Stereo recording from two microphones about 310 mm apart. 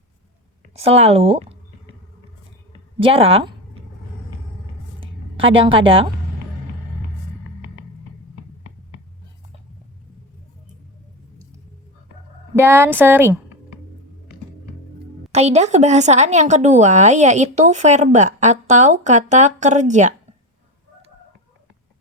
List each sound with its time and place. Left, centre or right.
0.8 s speech: centre
3.0 s a woman's voice: centre
4.9 s a sound: centre
12.5 s a woman's voice: centre
15.3 s speech: right